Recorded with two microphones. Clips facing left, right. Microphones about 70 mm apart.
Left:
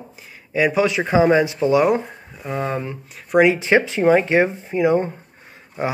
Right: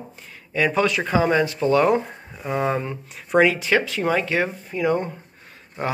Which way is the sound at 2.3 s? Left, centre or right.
Centre.